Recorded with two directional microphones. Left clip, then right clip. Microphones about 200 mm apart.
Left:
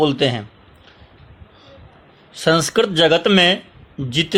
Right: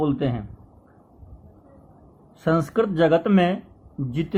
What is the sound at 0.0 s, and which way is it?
Speech, 25° left (ahead or behind).